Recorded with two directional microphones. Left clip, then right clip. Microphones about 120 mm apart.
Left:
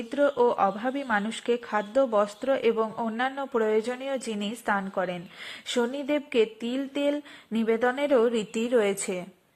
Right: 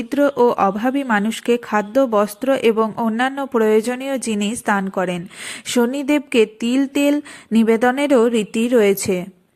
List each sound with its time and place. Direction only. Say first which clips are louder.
0.1 s speech: right 7 dB; 20° right (ahead or behind)
3.5 s speech: right 10 dB; 20° right (ahead or behind)